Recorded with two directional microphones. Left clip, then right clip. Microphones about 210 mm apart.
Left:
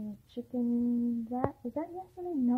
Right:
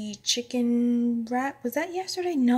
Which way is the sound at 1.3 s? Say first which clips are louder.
Right 7 dB; 35° right (ahead or behind).